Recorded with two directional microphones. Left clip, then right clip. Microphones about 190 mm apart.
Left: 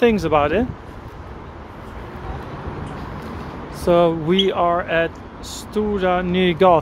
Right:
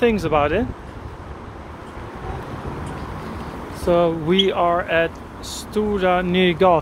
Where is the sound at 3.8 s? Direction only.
10° left (ahead or behind).